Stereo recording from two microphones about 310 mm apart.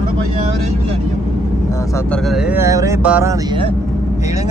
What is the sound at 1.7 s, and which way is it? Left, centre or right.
Speech, centre.